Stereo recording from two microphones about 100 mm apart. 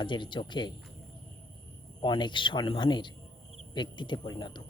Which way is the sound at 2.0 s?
50° left (ahead or behind).